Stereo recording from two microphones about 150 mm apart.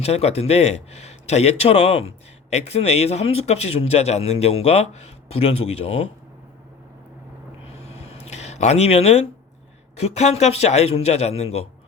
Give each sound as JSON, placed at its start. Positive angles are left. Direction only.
{"t": 0.0, "sound": "a man's voice", "side_deg": 45}
{"t": 7.9, "sound": "a sound", "side_deg": 45}
{"t": 9.9, "sound": "a man's voice", "side_deg": 45}